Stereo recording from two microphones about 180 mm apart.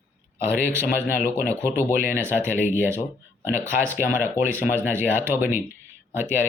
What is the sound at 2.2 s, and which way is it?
Speech, 10° right (ahead or behind).